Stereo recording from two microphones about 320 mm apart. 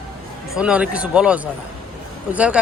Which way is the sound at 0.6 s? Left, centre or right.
Centre.